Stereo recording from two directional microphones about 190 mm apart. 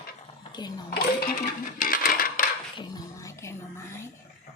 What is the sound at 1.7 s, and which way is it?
Coin, 45° left (ahead or behind).